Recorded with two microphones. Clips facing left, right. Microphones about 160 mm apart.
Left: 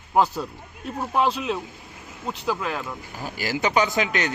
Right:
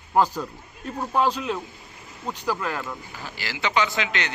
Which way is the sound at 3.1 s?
45° left (ahead or behind).